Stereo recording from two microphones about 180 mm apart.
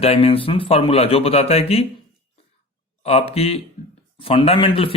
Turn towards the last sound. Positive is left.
turn(degrees=30)  # may be behind; listen again after turning